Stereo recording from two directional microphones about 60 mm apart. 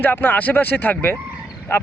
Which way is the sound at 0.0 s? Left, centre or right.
Left.